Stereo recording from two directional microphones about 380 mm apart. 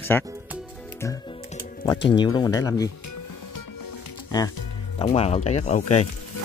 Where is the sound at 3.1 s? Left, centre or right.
Left.